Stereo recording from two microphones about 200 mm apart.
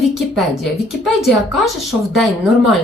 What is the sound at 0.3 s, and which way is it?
A woman's voice, centre (ahead or behind).